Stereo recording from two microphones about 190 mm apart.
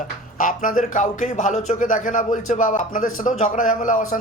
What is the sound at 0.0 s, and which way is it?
Speech, 45° left (ahead or behind).